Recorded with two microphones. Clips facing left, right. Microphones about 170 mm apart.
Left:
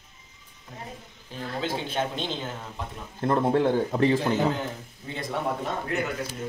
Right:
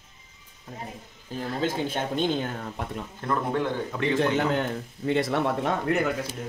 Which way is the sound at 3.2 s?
30° left (ahead or behind).